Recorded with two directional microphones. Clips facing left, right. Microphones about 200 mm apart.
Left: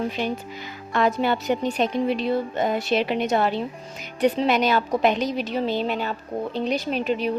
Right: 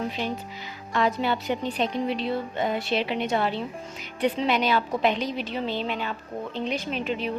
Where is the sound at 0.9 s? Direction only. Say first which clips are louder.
Left 3 dB; 50° left (ahead or behind).